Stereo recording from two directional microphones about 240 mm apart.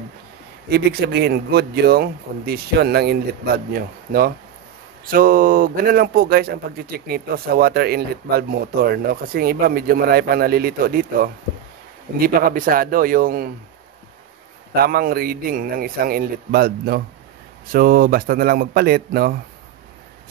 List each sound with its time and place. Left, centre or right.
0.7 s speech: right
5.1 s speech: right
14.7 s speech: right